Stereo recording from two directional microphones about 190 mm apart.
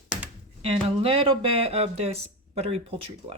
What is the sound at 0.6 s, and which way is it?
Speech, 30° right (ahead or behind).